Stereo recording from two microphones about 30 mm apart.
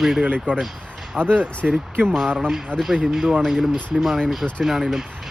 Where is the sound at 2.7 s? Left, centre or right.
Left.